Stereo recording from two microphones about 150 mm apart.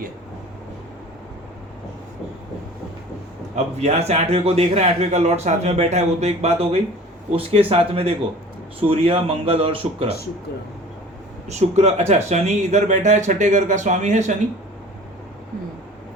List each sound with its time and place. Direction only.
3.5 s a man's voice: 50° right (ahead or behind)
11.4 s a man's voice: 50° right (ahead or behind)